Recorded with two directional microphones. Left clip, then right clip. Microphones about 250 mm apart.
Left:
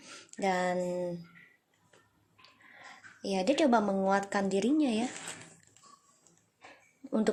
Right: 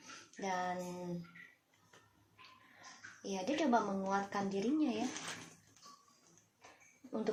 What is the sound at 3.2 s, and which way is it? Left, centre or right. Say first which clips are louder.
Speech: left 9 dB; left.